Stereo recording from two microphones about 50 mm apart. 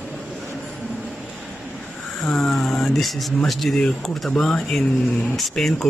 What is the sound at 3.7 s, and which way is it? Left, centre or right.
A man's voice, centre.